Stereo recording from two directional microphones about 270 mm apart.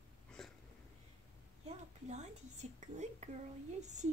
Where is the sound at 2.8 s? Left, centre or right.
Right.